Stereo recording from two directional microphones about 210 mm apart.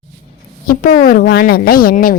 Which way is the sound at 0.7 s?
40° left (ahead or behind).